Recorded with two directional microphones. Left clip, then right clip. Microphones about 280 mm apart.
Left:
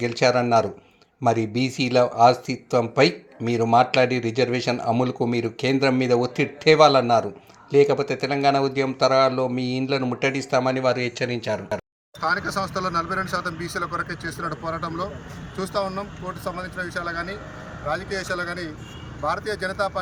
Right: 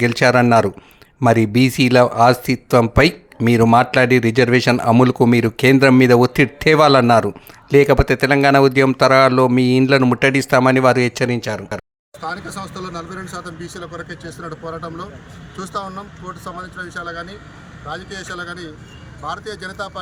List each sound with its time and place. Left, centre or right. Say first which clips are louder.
0.0 s speech: right 6 dB; right
12.5 s speech: left 4 dB; centre
14.3 s speech: even; centre